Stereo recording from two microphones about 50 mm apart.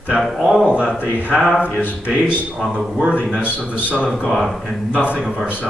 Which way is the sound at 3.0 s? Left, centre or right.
Right.